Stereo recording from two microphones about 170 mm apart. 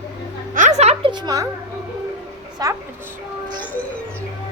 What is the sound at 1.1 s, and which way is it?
Speech, 25° right (ahead or behind).